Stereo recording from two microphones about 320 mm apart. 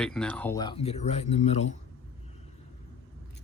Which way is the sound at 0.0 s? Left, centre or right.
Centre.